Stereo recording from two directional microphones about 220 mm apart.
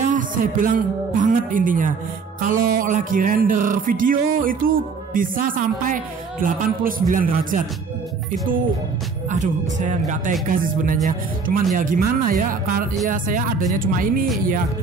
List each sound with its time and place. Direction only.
0.0 s speech: 35° right (ahead or behind)
2.5 s music: 40° right (ahead or behind)
9.3 s music: 35° right (ahead or behind)